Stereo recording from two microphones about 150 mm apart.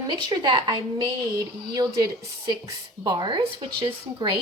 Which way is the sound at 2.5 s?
30° right (ahead or behind).